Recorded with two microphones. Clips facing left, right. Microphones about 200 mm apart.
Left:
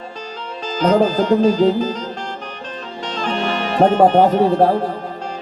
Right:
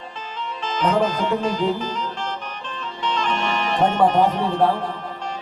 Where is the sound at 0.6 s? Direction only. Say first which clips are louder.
Left 5 dB; 40° left (ahead or behind).